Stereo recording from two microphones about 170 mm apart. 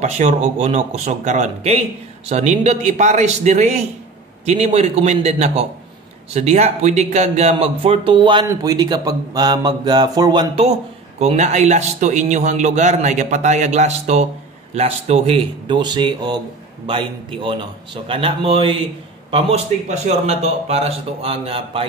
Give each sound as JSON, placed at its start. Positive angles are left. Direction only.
{"t": 0.0, "sound": "a man's voice", "side_deg": -45}
{"t": 10.5, "sound": "a man's voice", "side_deg": -40}